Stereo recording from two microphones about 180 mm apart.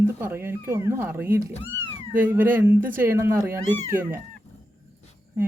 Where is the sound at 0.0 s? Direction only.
15° right (ahead or behind).